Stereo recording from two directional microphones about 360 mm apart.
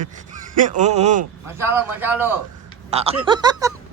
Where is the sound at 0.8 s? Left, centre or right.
Centre.